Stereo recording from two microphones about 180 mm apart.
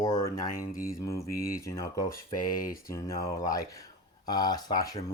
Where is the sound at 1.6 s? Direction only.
15° left (ahead or behind).